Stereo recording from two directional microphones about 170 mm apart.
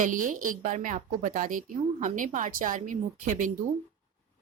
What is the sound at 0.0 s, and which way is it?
Speech, 50° right (ahead or behind).